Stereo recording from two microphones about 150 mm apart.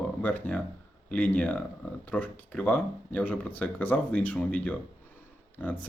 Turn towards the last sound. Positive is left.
turn(degrees=10)  # may be behind; listen again after turning